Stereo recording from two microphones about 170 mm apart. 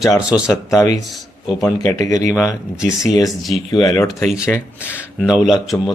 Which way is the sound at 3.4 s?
Centre (ahead or behind).